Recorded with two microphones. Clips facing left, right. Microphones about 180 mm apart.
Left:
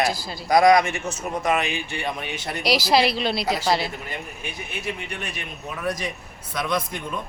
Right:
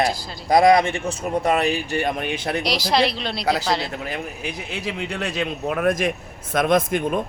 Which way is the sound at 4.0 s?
90° right.